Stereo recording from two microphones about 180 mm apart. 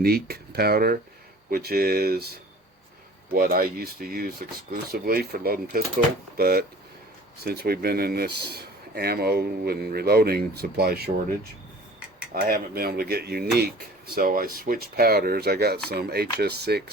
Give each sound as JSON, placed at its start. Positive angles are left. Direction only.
{"t": 0.0, "sound": "speech", "side_deg": -60}
{"t": 3.3, "sound": "speech", "side_deg": -60}
{"t": 14.2, "sound": "speech", "side_deg": -50}